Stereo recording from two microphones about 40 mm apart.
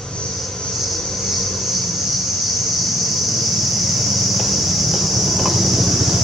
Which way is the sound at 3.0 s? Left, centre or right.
Centre.